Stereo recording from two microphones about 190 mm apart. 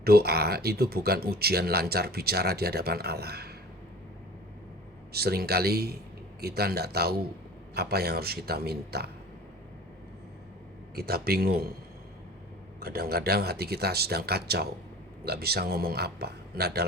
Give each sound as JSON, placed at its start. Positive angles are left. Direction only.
{"t": 0.0, "sound": "speech", "side_deg": -55}
{"t": 5.1, "sound": "speech", "side_deg": -55}
{"t": 10.9, "sound": "speech", "side_deg": -55}
{"t": 12.8, "sound": "speech", "side_deg": -55}